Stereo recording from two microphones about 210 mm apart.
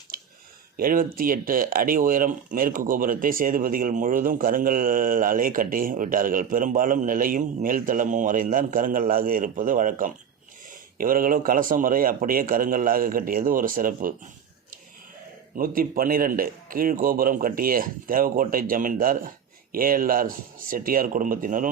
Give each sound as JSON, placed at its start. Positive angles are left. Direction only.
{"t": 0.1, "sound": "a sound", "side_deg": -45}
{"t": 0.8, "sound": "speech", "side_deg": -45}
{"t": 15.5, "sound": "a man's voice", "side_deg": -45}